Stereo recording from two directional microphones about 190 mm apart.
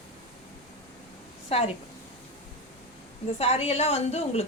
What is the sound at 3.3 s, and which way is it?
A woman's voice, 30° left (ahead or behind).